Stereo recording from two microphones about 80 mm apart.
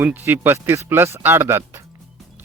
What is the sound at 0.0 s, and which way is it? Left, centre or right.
Speech, right.